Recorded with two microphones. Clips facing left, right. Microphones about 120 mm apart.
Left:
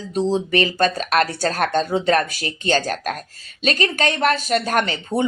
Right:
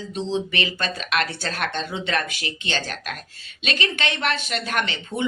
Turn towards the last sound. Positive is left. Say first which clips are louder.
# left 6 dB
turn(degrees=40)  # may be behind; listen again after turning